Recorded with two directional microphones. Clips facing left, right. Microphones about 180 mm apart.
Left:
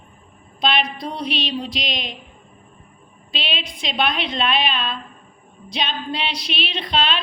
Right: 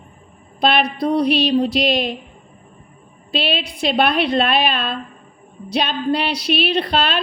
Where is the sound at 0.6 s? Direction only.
60° right (ahead or behind).